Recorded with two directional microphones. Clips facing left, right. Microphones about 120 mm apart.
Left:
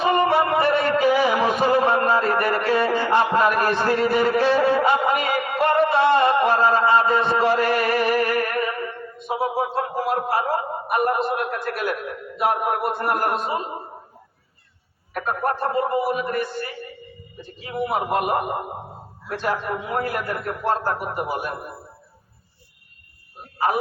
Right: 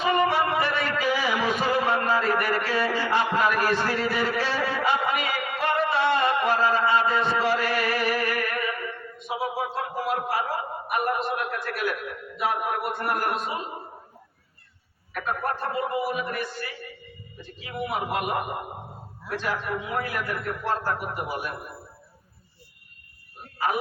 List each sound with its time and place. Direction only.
0.0 s music: 50° left (ahead or behind)
1.9 s a sound: 45° left (ahead or behind)
7.4 s music: 45° left (ahead or behind)
9.2 s a sound: 40° left (ahead or behind)
9.7 s a man's voice: 40° left (ahead or behind)
15.1 s a man's voice: 40° left (ahead or behind)
21.2 s a man's voice: 40° left (ahead or behind)